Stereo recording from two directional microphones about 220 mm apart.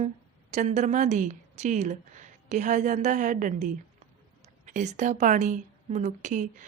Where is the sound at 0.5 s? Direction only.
30° right (ahead or behind).